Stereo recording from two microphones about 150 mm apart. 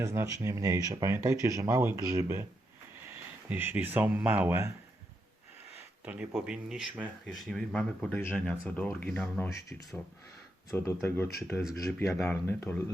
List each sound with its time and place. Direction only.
0.0 s speech: 20° right (ahead or behind)
3.5 s speech: 10° right (ahead or behind)
6.1 s speech: 5° right (ahead or behind)
10.7 s speech: 20° left (ahead or behind)